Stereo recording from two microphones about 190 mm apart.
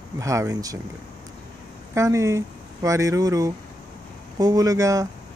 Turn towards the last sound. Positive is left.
turn(degrees=-15)  # may be behind; listen again after turning